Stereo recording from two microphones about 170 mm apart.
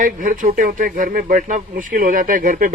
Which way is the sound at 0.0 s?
50° right (ahead or behind).